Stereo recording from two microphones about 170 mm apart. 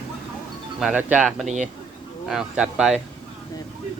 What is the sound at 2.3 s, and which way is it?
Speech, 5° right (ahead or behind).